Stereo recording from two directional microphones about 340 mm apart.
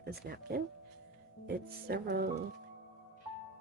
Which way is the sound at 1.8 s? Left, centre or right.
Right.